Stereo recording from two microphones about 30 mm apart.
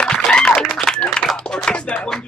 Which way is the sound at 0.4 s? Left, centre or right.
Left.